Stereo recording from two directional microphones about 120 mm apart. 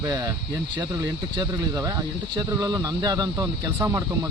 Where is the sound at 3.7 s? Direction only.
20° right (ahead or behind).